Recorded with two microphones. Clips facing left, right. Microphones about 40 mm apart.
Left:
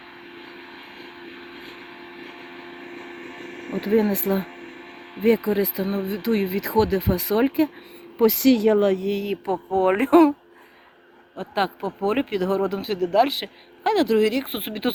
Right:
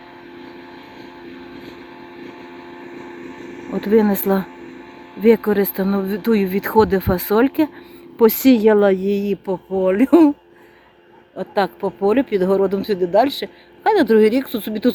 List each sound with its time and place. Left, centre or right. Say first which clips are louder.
1.2 s vehicle: right 6 dB; left
2.2 s a sound: right 3 dB; left
3.8 s speech: right 5 dB; right
9.0 s speech: right 6 dB; centre
9.9 s speech: right 4 dB; left
11.3 s speech: right 5 dB; centre
14.4 s speech: right 7 dB; centre